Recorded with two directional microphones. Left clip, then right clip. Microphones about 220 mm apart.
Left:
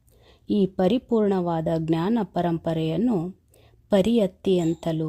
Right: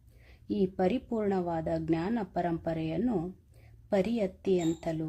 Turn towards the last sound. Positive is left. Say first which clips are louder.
# left 6 dB
turn(degrees=40)  # may be behind; listen again after turning